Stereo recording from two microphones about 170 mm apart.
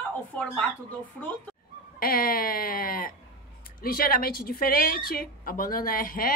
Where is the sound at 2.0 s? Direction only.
60° left (ahead or behind).